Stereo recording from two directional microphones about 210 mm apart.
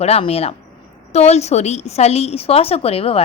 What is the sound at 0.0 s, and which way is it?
A woman's voice, 30° left (ahead or behind).